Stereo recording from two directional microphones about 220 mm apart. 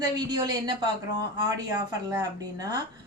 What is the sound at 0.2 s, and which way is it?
A woman's voice, 20° right (ahead or behind).